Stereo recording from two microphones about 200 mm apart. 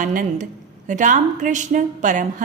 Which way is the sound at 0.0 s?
40° right (ahead or behind).